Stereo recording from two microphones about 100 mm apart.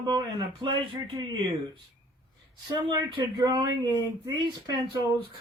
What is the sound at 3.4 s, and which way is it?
Speech, 40° right (ahead or behind).